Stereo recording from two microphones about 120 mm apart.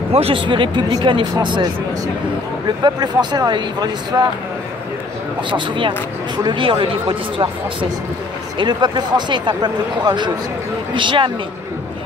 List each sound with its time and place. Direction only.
0.1 s speech: 50° right (ahead or behind); by 1.7 s 35° right (ahead or behind)
2.8 s speech: 35° right (ahead or behind)
5.5 s speech: 40° right (ahead or behind)
8.5 s speech: 40° right (ahead or behind)